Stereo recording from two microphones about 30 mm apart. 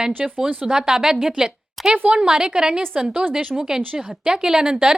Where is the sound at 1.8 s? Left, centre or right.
Centre.